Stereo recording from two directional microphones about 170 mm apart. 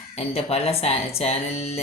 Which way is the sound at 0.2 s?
35° left (ahead or behind).